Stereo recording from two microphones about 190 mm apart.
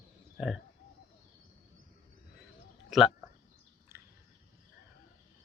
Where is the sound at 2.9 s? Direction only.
Centre (ahead or behind).